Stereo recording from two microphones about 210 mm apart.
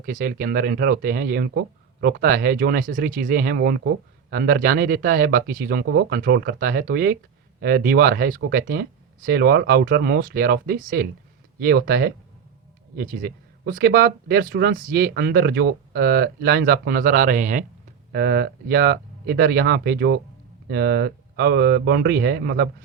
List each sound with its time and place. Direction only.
0.0 s speech: 45° right (ahead or behind)
18.1 s speech: 45° right (ahead or behind)